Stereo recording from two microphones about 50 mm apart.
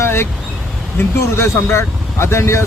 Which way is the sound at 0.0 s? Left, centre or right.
Left.